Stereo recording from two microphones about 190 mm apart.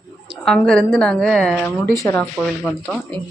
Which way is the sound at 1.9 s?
15° left (ahead or behind).